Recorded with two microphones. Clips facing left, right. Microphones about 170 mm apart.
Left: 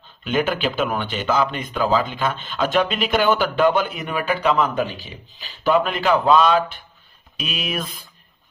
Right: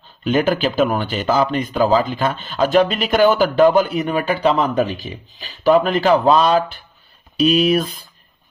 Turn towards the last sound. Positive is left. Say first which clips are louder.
# right 13 dB
turn(degrees=-35)  # may be behind; listen again after turning